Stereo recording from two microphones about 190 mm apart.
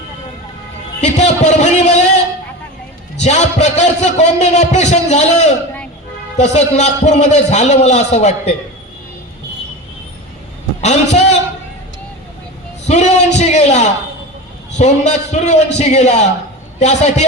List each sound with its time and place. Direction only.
1.0 s a sound: 35° left (ahead or behind)
3.2 s a man's voice: 35° left (ahead or behind)
10.8 s a man's voice: 35° left (ahead or behind)
12.9 s a man's voice: 35° left (ahead or behind)